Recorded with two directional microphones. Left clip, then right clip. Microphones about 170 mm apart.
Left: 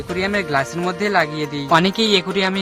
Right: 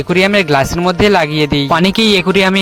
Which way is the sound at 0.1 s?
50° right (ahead or behind).